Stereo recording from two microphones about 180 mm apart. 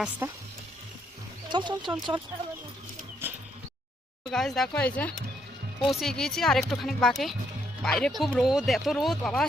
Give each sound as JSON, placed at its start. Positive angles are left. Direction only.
{"t": 0.2, "sound": "speech", "side_deg": -15}
{"t": 1.5, "sound": "speech", "side_deg": -25}
{"t": 3.2, "sound": "a sound", "side_deg": -10}
{"t": 4.3, "sound": "speech", "side_deg": 0}